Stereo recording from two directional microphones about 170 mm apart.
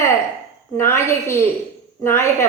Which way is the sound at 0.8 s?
15° left (ahead or behind).